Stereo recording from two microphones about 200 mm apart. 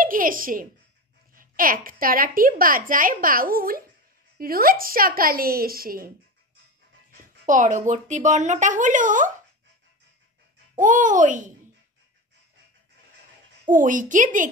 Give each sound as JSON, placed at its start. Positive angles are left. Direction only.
{"t": 0.0, "sound": "a child's voice", "side_deg": -45}
{"t": 10.8, "sound": "speech", "side_deg": -40}
{"t": 13.7, "sound": "speech", "side_deg": -40}